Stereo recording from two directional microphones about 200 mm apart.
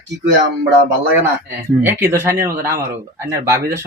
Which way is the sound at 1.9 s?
10° right (ahead or behind).